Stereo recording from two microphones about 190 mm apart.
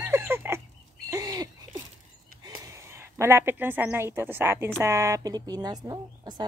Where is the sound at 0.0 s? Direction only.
10° right (ahead or behind).